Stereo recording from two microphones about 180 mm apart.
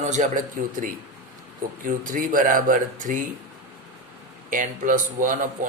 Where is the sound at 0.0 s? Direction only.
40° right (ahead or behind).